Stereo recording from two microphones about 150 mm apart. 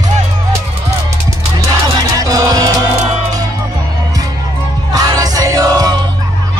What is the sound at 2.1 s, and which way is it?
Music, 25° right (ahead or behind).